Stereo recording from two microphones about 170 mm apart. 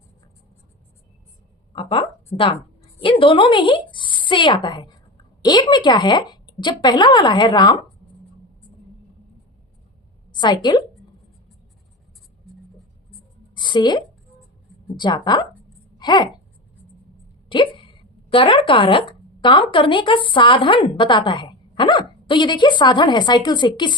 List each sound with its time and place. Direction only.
1.7 s a woman's voice: 30° left (ahead or behind)
10.3 s a woman's voice: 25° left (ahead or behind)
13.6 s a woman's voice: 25° left (ahead or behind)
16.0 s a sound: 25° left (ahead or behind)
17.5 s speech: 30° left (ahead or behind)